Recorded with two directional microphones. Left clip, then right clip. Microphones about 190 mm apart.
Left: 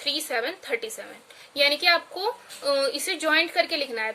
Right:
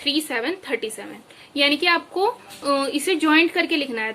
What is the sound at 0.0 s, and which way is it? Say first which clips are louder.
A woman's voice: right 4 dB; 20° left (ahead or behind).